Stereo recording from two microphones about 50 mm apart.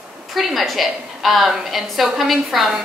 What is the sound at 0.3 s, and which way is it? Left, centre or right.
A woman's voice, centre.